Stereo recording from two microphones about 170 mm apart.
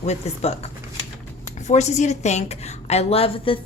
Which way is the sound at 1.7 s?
45° left (ahead or behind).